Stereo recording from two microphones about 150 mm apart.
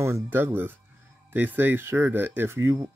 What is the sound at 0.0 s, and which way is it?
Speech, 15° right (ahead or behind).